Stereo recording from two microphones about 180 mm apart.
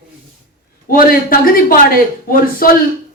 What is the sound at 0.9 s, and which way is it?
A man's voice, 55° left (ahead or behind).